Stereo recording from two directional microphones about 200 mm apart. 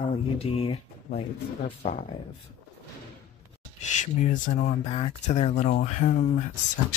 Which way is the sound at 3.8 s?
35° left (ahead or behind).